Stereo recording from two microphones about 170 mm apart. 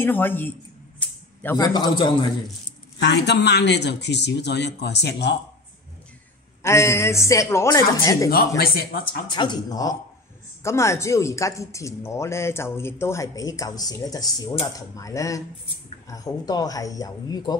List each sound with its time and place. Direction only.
0.0 s a sound: 10° left (ahead or behind)
1.6 s speech: 25° left (ahead or behind)
3.0 s a man's voice: 90° left
6.6 s speech: 15° left (ahead or behind)
8.5 s speech: 65° left (ahead or behind)
9.3 s speech: 25° left (ahead or behind)